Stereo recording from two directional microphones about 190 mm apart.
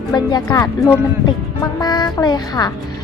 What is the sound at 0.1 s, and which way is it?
A woman's voice, 20° left (ahead or behind).